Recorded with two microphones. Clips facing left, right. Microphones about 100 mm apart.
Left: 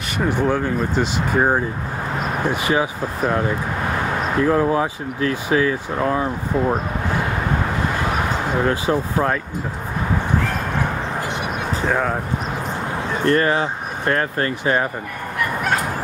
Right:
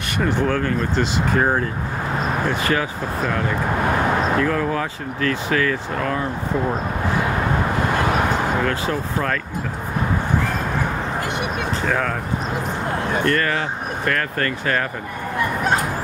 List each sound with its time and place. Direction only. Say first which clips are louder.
0.2 s speech: left 1 dB; 10° left (ahead or behind)
8.6 s speech: left 3 dB; 20° left (ahead or behind)
11.8 s speech: left 3 dB; 15° left (ahead or behind)
13.2 s speech: left 6 dB; 25° left (ahead or behind)
15.3 s bow-wow: right 1 dB; 25° right (ahead or behind)